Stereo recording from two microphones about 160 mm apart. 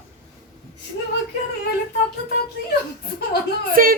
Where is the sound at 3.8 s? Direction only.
60° right (ahead or behind).